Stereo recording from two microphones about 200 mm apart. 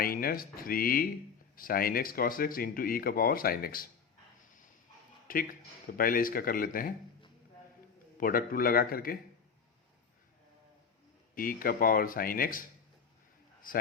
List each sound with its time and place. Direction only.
0.0 s speech: 45° left (ahead or behind)
5.3 s speech: 45° left (ahead or behind)
8.2 s speech: 45° left (ahead or behind)
11.3 s speech: 45° left (ahead or behind)